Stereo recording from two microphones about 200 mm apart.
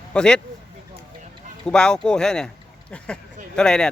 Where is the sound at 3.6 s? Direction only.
5° left (ahead or behind).